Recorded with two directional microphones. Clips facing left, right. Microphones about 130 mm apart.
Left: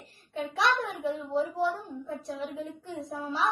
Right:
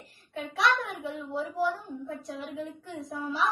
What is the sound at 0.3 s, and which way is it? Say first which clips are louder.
A child's voice: even; 30° left (ahead or behind).